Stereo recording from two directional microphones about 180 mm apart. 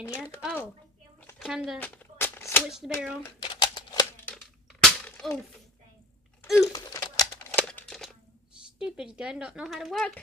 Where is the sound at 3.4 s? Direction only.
25° left (ahead or behind).